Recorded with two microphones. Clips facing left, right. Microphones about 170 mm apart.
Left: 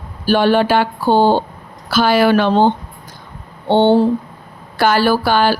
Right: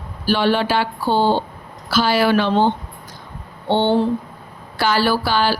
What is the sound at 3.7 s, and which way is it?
Speech, 45° left (ahead or behind).